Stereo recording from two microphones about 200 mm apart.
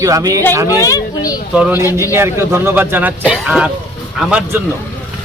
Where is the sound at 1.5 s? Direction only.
5° right (ahead or behind).